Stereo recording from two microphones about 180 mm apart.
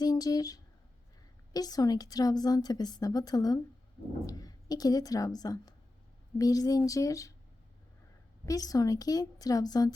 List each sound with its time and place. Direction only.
0.0 s a sound: 20° left (ahead or behind)
1.5 s a woman's voice: 20° left (ahead or behind)
8.4 s a woman's voice: 20° left (ahead or behind)